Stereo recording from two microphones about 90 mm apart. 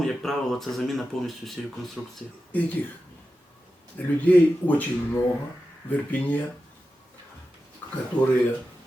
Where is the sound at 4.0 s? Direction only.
20° left (ahead or behind).